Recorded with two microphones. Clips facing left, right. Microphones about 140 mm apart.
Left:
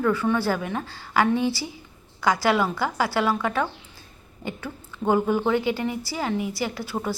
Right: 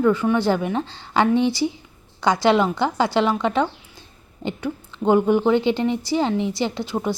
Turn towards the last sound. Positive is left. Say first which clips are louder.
# right 4 dB
turn(degrees=-20)  # may be behind; listen again after turning